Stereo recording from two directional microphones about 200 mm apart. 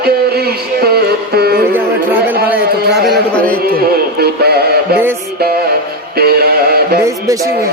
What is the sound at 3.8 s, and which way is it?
Music, 50° right (ahead or behind).